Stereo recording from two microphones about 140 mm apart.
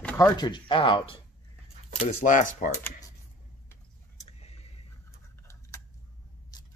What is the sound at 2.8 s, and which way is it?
Speech, 25° left (ahead or behind).